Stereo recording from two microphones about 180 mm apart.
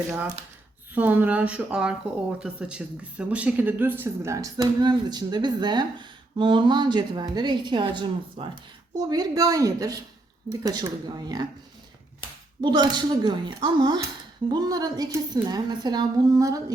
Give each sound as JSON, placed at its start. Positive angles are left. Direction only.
{"t": 0.9, "sound": "speech", "side_deg": -10}
{"t": 12.6, "sound": "speech", "side_deg": -25}